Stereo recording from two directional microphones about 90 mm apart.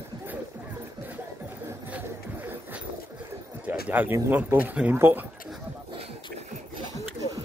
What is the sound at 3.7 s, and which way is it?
Speech, 20° right (ahead or behind).